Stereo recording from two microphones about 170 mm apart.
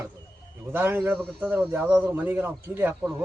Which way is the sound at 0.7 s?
10° right (ahead or behind).